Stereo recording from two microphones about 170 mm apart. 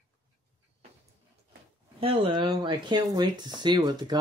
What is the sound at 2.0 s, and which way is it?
Speech, 30° right (ahead or behind).